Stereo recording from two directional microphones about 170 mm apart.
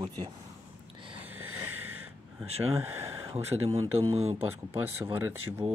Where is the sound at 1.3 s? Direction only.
10° right (ahead or behind).